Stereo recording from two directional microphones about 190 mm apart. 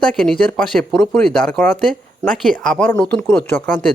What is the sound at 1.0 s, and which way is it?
Speech, centre (ahead or behind).